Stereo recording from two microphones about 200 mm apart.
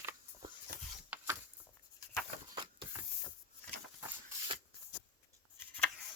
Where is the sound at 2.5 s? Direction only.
25° right (ahead or behind).